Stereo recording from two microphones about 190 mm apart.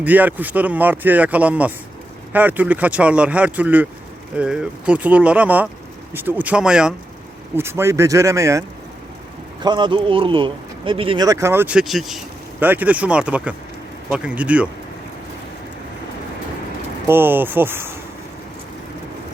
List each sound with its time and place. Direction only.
0.0 s speech: 10° right (ahead or behind)
9.6 s speech: 25° right (ahead or behind); by 14.7 s 5° right (ahead or behind)
17.1 s speech: 10° right (ahead or behind)